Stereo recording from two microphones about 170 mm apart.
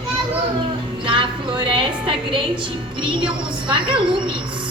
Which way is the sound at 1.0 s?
30° right (ahead or behind).